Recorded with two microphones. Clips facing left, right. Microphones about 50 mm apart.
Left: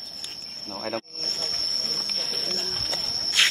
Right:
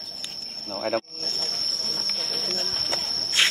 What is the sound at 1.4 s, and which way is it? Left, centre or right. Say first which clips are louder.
Cricket: left 1 dB; left.